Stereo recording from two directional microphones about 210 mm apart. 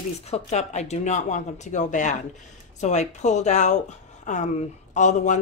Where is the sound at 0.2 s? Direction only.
30° left (ahead or behind).